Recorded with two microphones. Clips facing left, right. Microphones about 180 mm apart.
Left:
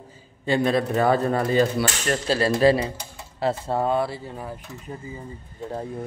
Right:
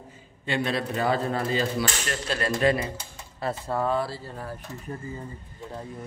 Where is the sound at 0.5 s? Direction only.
45° left (ahead or behind).